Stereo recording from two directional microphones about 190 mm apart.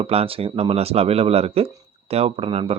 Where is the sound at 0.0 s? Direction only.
30° right (ahead or behind).